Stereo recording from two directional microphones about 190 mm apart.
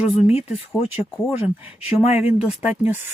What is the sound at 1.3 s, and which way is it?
Speech, 10° right (ahead or behind).